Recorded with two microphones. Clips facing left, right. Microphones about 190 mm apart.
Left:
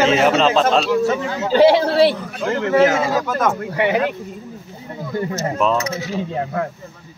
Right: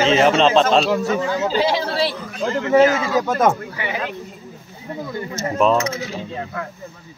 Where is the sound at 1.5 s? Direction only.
60° left (ahead or behind).